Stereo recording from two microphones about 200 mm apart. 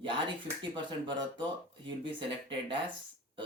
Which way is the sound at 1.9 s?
25° right (ahead or behind).